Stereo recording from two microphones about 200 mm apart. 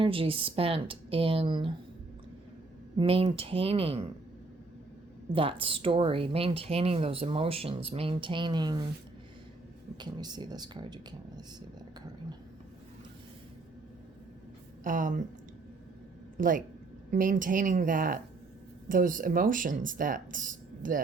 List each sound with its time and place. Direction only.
0.0 s speech: 25° right (ahead or behind)
3.0 s speech: 25° right (ahead or behind)
5.3 s speech: 25° right (ahead or behind)
10.0 s speech: 20° right (ahead or behind)
14.8 s speech: 40° right (ahead or behind)
16.4 s speech: 40° right (ahead or behind)